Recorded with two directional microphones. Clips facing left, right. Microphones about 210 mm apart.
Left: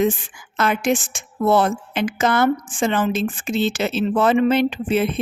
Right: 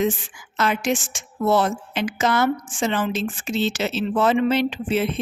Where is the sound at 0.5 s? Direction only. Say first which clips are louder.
Left 3 dB; 55° left (ahead or behind).